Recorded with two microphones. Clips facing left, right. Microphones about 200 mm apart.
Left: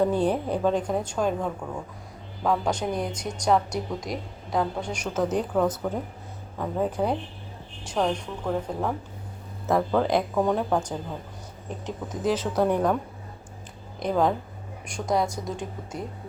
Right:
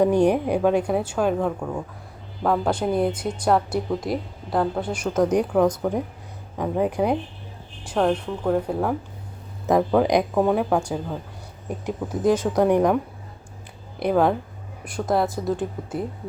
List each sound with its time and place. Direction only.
0.0 s a woman's voice: 15° right (ahead or behind)
2.4 s a woman's voice: 5° right (ahead or behind)
12.2 s speech: 50° right (ahead or behind)
12.5 s a woman's voice: 15° right (ahead or behind)
14.1 s a woman's voice: 5° right (ahead or behind)